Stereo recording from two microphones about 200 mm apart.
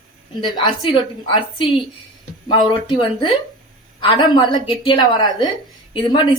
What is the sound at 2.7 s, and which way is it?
A woman's voice, 25° left (ahead or behind).